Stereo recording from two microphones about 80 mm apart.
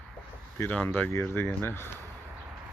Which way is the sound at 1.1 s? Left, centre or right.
Left.